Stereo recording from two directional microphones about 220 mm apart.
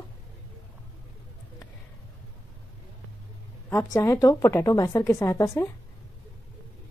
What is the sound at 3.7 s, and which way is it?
A woman's voice, 10° left (ahead or behind).